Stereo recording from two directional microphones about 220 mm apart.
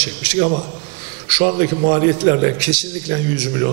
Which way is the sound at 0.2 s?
10° right (ahead or behind).